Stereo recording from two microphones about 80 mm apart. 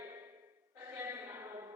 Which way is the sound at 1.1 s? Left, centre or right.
Right.